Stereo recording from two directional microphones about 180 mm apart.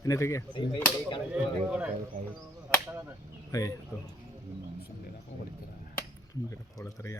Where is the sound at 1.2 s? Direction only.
5° right (ahead or behind).